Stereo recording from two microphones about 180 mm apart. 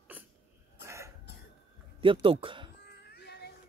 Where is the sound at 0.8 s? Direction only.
15° right (ahead or behind).